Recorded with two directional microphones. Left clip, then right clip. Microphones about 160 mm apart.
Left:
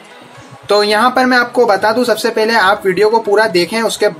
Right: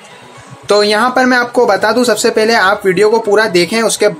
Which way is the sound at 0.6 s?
20° right (ahead or behind).